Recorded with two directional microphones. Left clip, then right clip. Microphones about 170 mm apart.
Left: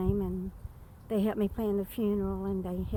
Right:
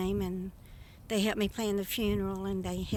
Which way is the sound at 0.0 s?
15° right (ahead or behind).